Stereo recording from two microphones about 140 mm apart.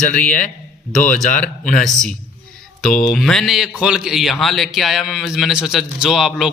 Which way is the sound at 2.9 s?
90° left.